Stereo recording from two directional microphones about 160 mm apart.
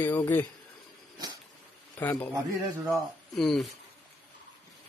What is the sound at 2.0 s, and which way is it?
Speech, 10° left (ahead or behind).